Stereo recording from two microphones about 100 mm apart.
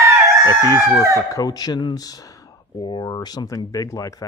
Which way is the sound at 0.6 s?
35° left (ahead or behind).